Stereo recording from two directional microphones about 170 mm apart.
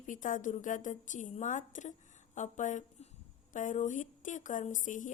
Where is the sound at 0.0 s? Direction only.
50° left (ahead or behind).